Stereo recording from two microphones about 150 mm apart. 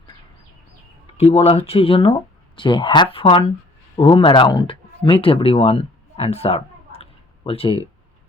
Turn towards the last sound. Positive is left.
turn(degrees=40)  # may be behind; listen again after turning